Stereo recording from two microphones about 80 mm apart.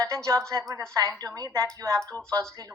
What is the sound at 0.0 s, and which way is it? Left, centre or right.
A woman's voice, right.